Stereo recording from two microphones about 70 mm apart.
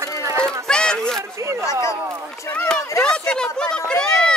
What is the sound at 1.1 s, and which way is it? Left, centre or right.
Speech, right.